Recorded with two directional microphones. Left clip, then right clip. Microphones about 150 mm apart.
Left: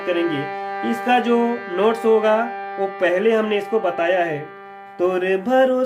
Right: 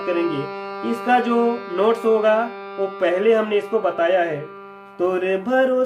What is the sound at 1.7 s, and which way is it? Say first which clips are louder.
Music: left 2 dB; 25° left (ahead or behind).